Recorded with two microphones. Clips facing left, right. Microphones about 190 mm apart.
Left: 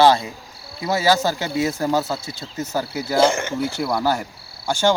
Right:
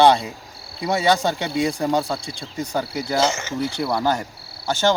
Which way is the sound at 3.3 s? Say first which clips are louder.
Left 4 dB; 55° left (ahead or behind).